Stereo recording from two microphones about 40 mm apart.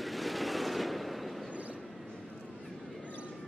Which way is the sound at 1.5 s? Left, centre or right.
Right.